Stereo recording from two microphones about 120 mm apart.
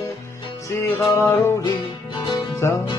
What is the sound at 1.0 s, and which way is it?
Music, 25° left (ahead or behind).